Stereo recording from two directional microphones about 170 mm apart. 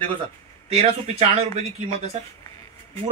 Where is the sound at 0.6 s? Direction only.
40° right (ahead or behind).